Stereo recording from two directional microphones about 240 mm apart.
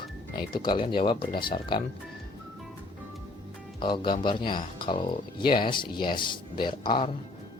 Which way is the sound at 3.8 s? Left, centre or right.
Centre.